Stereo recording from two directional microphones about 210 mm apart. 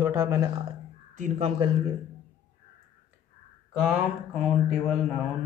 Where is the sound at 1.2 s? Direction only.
35° right (ahead or behind).